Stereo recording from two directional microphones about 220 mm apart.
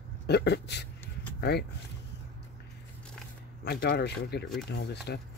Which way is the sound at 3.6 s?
50° left (ahead or behind).